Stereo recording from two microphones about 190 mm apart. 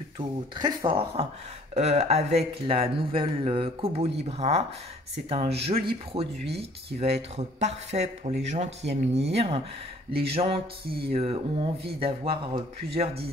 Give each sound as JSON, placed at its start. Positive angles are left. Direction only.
{"t": 0.6, "sound": "speech", "side_deg": -25}